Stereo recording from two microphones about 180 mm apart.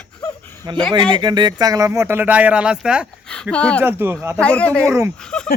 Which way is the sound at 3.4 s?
5° left (ahead or behind).